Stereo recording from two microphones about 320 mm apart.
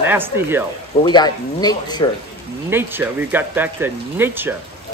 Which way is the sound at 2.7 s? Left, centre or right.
Centre.